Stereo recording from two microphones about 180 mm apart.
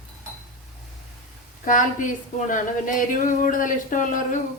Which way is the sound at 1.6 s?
45° left (ahead or behind).